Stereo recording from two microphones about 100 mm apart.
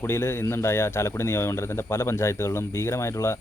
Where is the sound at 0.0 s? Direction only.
25° left (ahead or behind).